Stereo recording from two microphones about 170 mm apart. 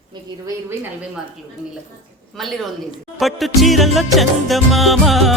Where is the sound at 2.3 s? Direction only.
Centre (ahead or behind).